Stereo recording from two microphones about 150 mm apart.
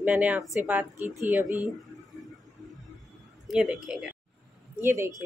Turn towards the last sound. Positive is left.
turn(degrees=-15)  # may be behind; listen again after turning